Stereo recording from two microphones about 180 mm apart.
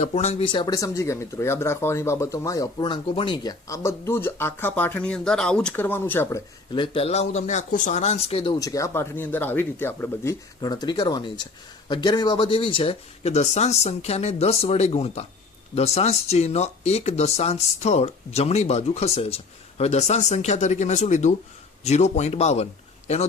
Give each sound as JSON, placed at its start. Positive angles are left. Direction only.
{"t": 0.0, "sound": "speech", "side_deg": 35}
{"t": 6.7, "sound": "speech", "side_deg": 30}
{"t": 8.5, "sound": "speech", "side_deg": 20}
{"t": 10.6, "sound": "speech", "side_deg": 25}